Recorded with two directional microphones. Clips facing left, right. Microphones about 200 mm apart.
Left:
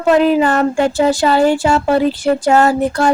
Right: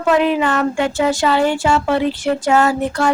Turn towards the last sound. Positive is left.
turn(degrees=35)  # may be behind; listen again after turning